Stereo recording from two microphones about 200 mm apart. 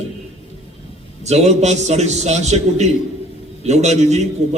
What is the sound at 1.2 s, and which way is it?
A man's voice, 35° right (ahead or behind).